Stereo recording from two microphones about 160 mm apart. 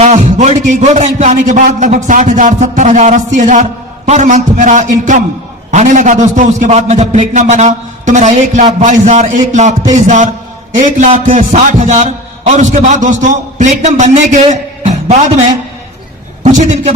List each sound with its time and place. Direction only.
0.0 s a man's voice: 45° right (ahead or behind)
16.4 s a man's voice: 45° right (ahead or behind)